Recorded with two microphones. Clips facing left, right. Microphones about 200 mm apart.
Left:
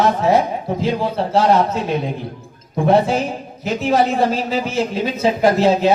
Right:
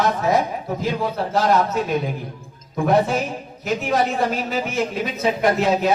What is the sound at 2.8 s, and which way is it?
Speech, 30° left (ahead or behind).